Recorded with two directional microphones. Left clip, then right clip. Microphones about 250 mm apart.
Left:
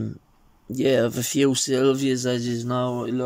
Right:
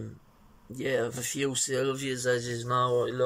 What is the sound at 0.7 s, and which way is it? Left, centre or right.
Speech, left.